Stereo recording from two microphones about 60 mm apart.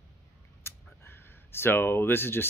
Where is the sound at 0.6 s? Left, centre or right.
Left.